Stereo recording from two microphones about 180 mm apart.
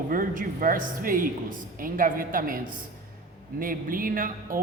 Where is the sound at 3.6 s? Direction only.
50° right (ahead or behind).